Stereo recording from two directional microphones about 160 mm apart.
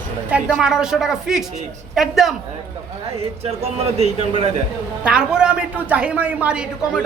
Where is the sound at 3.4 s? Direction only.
40° right (ahead or behind).